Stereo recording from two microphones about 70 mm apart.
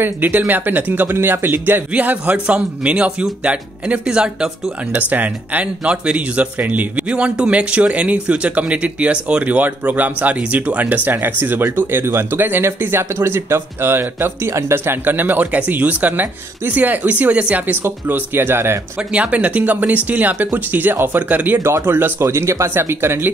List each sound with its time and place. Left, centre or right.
0.0 s speech: right
1.9 s a man's voice: right
4.9 s speech: right
18.9 s speech: centre
21.6 s speech: right